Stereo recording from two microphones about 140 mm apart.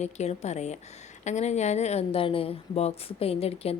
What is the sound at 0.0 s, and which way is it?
Speech, 50° left (ahead or behind).